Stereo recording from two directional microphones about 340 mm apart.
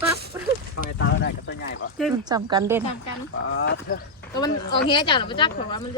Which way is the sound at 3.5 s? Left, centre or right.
Left.